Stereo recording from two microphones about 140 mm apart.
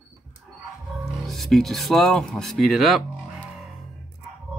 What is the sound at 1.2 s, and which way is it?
Speech, centre (ahead or behind).